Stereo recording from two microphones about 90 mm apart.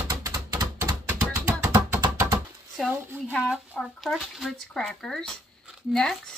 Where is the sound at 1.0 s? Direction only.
20° right (ahead or behind).